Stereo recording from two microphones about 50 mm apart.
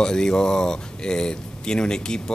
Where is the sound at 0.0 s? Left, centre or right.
Centre.